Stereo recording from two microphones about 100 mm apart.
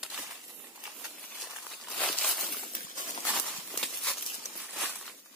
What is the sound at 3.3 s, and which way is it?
Walk, 5° left (ahead or behind).